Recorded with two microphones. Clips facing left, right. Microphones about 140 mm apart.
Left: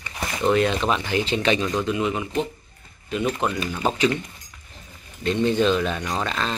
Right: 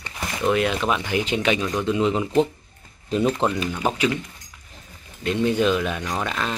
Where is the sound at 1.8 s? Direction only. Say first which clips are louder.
Right 3 dB; 25° right (ahead or behind).